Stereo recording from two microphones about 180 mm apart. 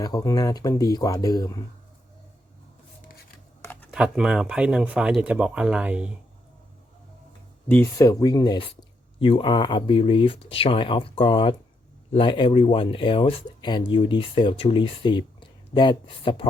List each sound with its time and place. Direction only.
0.0 s speech: 20° left (ahead or behind)
3.6 s computer keyboard: 10° left (ahead or behind)
3.9 s speech: 5° right (ahead or behind)
7.7 s speech: 15° left (ahead or behind)